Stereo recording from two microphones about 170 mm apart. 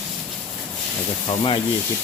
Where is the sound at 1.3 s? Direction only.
30° left (ahead or behind).